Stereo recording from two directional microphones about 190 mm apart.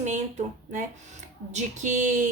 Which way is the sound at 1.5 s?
40° right (ahead or behind).